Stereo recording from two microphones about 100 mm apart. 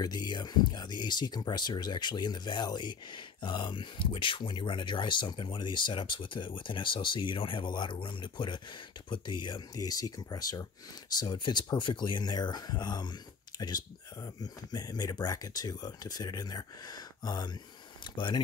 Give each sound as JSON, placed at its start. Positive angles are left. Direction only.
{"t": 0.0, "sound": "speech", "side_deg": 45}